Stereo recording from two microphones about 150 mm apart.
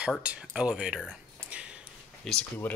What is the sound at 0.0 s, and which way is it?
Speech, 5° right (ahead or behind).